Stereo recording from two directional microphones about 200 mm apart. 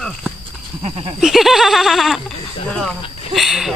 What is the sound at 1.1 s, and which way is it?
Speech, centre (ahead or behind).